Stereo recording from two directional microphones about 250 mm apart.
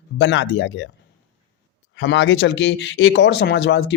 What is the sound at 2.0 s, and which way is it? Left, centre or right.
Speech, left.